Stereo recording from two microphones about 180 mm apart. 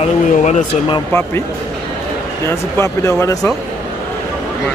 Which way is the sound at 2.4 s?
15° left (ahead or behind).